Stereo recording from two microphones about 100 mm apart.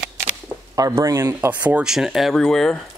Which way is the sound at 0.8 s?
35° right (ahead or behind).